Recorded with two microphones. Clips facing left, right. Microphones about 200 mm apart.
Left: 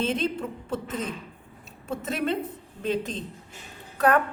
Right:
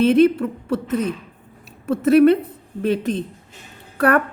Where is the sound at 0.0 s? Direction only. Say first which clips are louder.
Right 13 dB; 65° right (ahead or behind).